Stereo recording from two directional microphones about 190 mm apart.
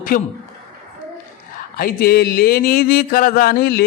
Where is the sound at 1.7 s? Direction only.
50° left (ahead or behind).